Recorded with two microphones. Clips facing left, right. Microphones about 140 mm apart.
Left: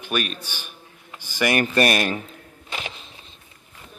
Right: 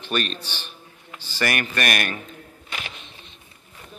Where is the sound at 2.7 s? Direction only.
25° left (ahead or behind).